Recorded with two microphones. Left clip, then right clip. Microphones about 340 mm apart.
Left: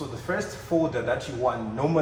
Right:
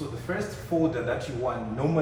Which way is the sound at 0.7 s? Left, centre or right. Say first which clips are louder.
Left 2 dB; left.